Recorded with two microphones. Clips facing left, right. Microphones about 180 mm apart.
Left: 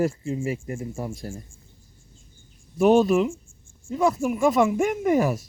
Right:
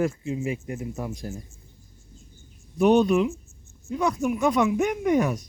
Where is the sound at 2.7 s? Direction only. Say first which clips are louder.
Left 1 dB; 5° left (ahead or behind).